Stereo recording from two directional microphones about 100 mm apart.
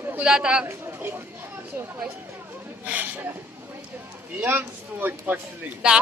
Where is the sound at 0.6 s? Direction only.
20° right (ahead or behind).